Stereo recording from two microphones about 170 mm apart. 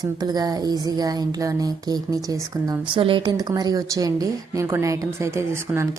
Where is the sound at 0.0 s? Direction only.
25° right (ahead or behind).